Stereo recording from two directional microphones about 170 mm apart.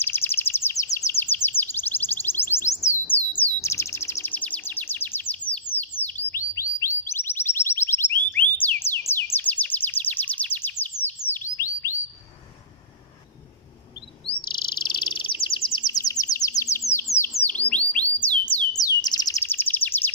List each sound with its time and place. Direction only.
0.0 s bird vocalization: 15° left (ahead or behind)
0.9 s chirp: 15° left (ahead or behind)
8.3 s a sound: 10° left (ahead or behind)
9.1 s bird: 10° left (ahead or behind)
14.2 s chirp: 30° left (ahead or behind)
15.9 s bird: 20° left (ahead or behind)
18.7 s chirp: 25° left (ahead or behind)